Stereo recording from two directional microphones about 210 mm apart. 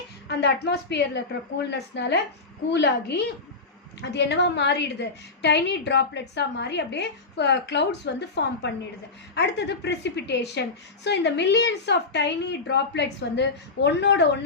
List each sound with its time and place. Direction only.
0.3 s a woman's voice: 50° left (ahead or behind)